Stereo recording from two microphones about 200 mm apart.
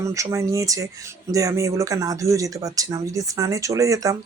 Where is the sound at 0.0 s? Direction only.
15° right (ahead or behind).